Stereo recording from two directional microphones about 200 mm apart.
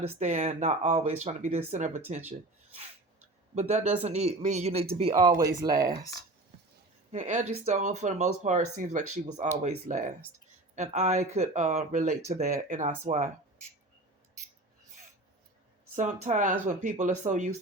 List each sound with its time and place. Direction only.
0.1 s speech: 35° right (ahead or behind)
3.5 s speech: 35° right (ahead or behind)
5.1 s speech: 20° right (ahead or behind)
7.1 s speech: 40° right (ahead or behind)
16.2 s speech: 40° right (ahead or behind)